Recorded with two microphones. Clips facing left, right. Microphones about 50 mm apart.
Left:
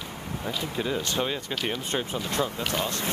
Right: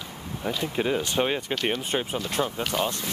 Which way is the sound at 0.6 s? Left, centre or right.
Right.